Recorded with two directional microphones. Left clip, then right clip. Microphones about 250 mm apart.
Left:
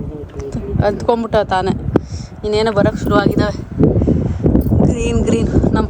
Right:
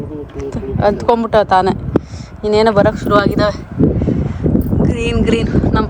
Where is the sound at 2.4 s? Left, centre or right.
Centre.